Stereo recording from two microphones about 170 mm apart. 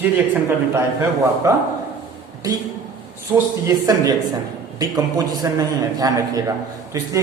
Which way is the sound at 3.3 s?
10° right (ahead or behind).